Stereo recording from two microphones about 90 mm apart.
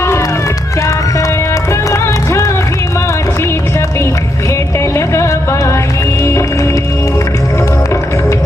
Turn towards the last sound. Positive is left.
turn(degrees=35)  # may be behind; listen again after turning